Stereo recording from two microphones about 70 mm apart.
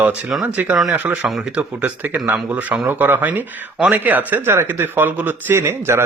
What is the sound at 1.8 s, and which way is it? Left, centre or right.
Speech, right.